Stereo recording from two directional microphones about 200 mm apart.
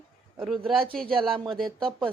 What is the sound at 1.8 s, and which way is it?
Speech, 25° right (ahead or behind).